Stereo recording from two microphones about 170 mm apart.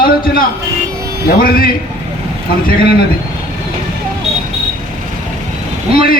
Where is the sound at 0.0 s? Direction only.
60° left (ahead or behind).